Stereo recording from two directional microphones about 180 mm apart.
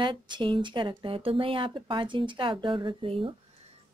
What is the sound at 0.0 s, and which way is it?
Speech, 25° right (ahead or behind).